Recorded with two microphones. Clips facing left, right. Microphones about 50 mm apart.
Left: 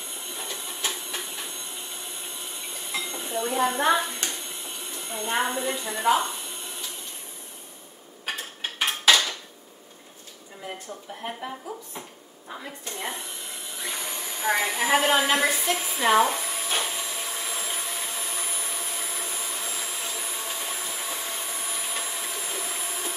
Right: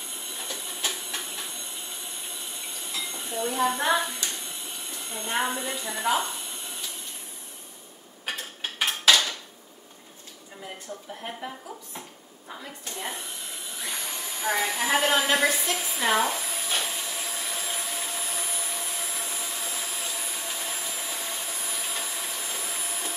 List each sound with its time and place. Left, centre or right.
0.4 s printer: centre
0.8 s a sound: centre
2.9 s train: left
3.2 s speech: centre
8.3 s dishes: centre
11.2 s a woman's voice: centre
16.7 s vacuum cleaner: centre
17.0 s vacuum cleaner: centre